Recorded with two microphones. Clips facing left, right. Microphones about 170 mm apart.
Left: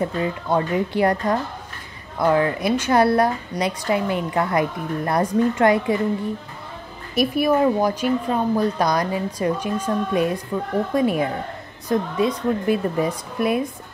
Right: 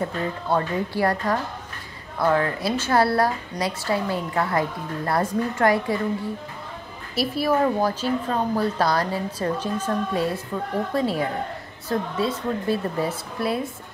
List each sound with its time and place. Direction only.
0.0 s a woman's voice: 20° left (ahead or behind)
7.2 s a woman's voice: 15° left (ahead or behind)